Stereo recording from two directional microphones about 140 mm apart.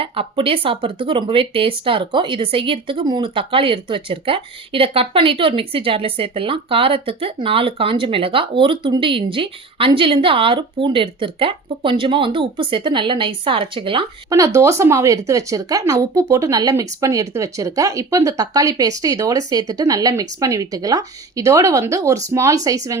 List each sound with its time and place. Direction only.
0.0 s speech: 40° right (ahead or behind)
14.3 s speech: 25° right (ahead or behind)